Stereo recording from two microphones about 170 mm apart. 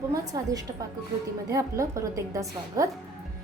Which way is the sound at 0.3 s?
20° right (ahead or behind).